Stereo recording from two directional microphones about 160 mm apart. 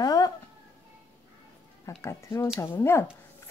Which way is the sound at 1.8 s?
20° left (ahead or behind).